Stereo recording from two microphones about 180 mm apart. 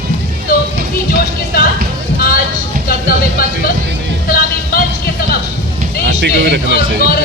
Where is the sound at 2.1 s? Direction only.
55° left (ahead or behind).